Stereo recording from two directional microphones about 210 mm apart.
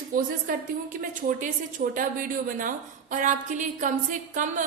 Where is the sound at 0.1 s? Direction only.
40° right (ahead or behind).